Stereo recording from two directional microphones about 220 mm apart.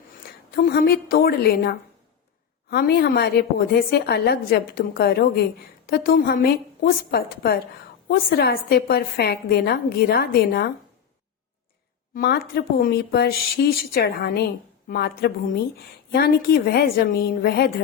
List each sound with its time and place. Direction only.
0.5 s a woman's voice: 40° left (ahead or behind)
12.1 s a woman's voice: 45° left (ahead or behind)